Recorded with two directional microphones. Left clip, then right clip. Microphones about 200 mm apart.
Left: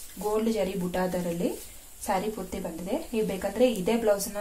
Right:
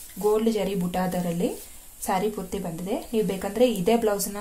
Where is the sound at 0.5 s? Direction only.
40° right (ahead or behind).